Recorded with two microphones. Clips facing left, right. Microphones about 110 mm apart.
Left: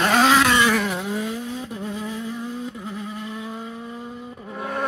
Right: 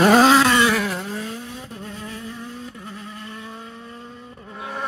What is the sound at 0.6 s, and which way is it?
Vehicle, centre (ahead or behind).